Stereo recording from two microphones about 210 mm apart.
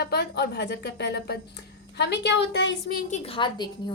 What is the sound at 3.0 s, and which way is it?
Speech, 30° left (ahead or behind).